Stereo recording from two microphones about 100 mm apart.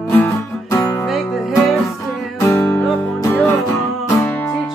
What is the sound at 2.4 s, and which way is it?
Music, 25° left (ahead or behind).